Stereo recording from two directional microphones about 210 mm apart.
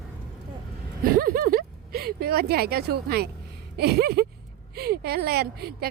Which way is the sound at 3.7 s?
50° right (ahead or behind).